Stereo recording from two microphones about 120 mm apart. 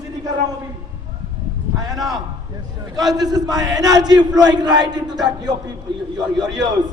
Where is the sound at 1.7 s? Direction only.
30° right (ahead or behind).